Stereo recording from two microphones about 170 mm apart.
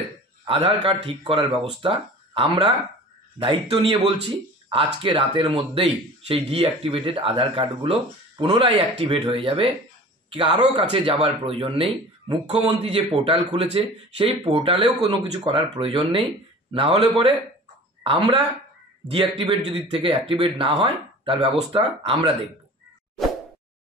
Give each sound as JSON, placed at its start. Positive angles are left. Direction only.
{"t": 0.5, "sound": "speech", "side_deg": -35}
{"t": 18.0, "sound": "speech", "side_deg": -30}